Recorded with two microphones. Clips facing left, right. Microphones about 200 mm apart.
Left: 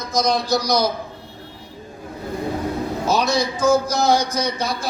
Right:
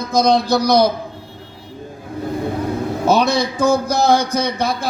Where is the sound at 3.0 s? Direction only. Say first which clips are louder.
Right 5 dB; 55° right (ahead or behind).